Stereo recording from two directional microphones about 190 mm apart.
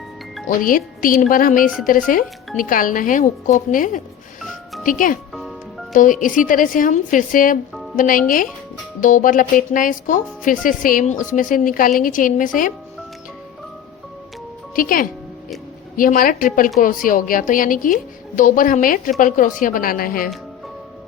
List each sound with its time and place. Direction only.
0.6 s a woman's voice: 45° left (ahead or behind)
5.3 s music: centre (ahead or behind)
5.9 s a woman's voice: 45° left (ahead or behind)
14.8 s a woman's voice: 45° left (ahead or behind)